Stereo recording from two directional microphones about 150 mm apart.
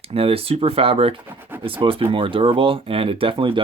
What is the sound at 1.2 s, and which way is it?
Speech, 15° right (ahead or behind).